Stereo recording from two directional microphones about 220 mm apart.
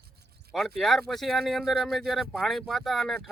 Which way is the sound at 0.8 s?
Centre (ahead or behind).